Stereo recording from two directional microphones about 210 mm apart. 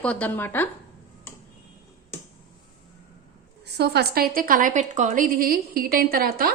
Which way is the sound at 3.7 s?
50° right (ahead or behind).